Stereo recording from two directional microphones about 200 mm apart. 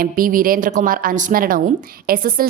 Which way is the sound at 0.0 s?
45° right (ahead or behind).